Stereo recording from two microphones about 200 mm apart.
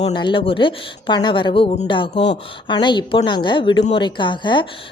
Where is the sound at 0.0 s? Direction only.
25° left (ahead or behind).